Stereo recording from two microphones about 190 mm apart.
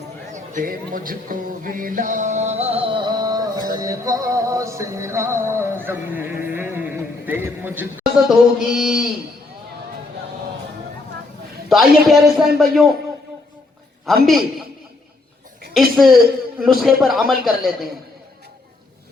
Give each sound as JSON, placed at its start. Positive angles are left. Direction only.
{"t": 0.3, "sound": "speech", "side_deg": -45}
{"t": 3.7, "sound": "music", "side_deg": -20}
{"t": 11.7, "sound": "a man's voice", "side_deg": 0}
{"t": 15.7, "sound": "a man's voice", "side_deg": 0}